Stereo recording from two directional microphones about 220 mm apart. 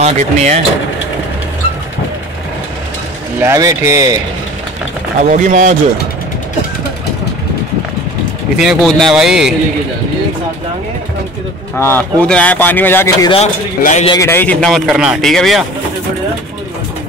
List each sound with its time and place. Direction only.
0.0 s speech: 30° right (ahead or behind)
3.3 s speech: 15° right (ahead or behind)
5.3 s speech: 35° right (ahead or behind)
8.5 s speech: centre (ahead or behind)
11.8 s speech: 10° left (ahead or behind)
13.3 s speech: 30° left (ahead or behind)
14.1 s speech: 10° left (ahead or behind)